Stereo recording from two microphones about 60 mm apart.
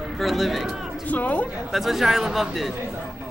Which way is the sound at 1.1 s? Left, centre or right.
Left.